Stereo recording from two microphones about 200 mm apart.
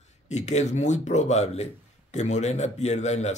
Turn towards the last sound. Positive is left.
turn(degrees=35)  # may be behind; listen again after turning